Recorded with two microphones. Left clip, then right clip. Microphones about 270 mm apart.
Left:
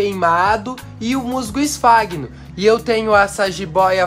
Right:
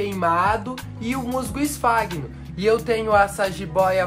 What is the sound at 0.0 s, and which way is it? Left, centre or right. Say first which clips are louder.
Speech: left 5 dB; left.